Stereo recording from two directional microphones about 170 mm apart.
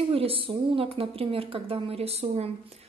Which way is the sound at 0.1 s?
35° right (ahead or behind).